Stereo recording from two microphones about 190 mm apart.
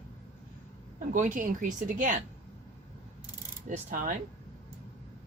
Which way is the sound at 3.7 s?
45° right (ahead or behind).